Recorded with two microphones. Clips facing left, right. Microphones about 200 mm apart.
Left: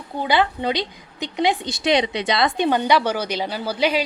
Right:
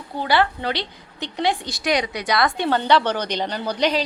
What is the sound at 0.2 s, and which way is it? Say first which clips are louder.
A woman's voice: even; 20° left (ahead or behind).